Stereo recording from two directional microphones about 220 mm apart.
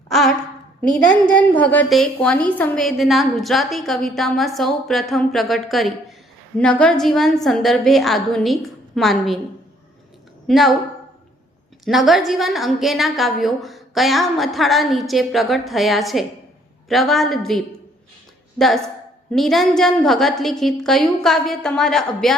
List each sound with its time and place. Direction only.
0.1 s a woman's voice: centre (ahead or behind)
10.4 s a woman's voice: centre (ahead or behind)
11.9 s a woman's voice: centre (ahead or behind)
19.3 s a woman's voice: centre (ahead or behind)